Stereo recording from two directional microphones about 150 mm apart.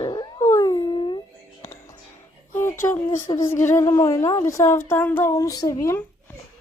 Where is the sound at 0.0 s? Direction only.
30° left (ahead or behind).